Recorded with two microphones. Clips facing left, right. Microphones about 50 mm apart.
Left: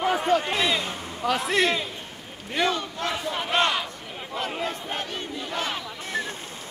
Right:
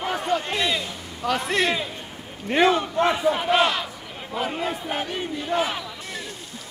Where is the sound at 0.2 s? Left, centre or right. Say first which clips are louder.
Left 1 dB; centre.